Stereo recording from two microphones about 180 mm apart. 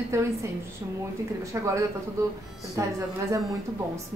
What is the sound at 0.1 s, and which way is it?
Speech, 15° right (ahead or behind).